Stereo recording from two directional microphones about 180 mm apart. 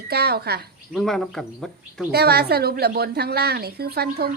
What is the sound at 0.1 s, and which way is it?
Speech, 60° right (ahead or behind).